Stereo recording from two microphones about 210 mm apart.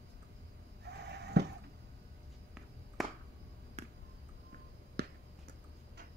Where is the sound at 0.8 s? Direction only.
50° right (ahead or behind).